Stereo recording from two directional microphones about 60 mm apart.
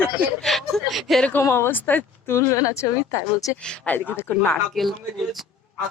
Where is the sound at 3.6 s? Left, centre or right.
Centre.